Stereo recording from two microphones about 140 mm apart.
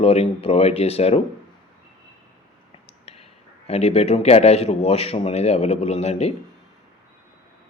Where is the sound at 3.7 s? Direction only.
50° left (ahead or behind).